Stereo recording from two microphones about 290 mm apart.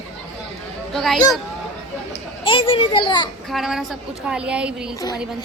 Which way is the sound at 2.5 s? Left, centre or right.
Centre.